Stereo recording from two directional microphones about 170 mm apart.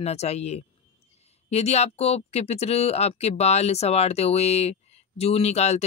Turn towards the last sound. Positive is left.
turn(degrees=40)  # may be behind; listen again after turning